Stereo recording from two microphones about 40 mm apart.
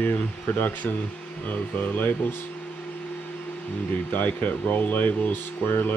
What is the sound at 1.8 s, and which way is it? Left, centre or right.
Speech, left.